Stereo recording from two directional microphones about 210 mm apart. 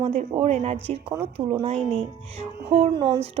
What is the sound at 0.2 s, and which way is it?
Speech, 30° right (ahead or behind).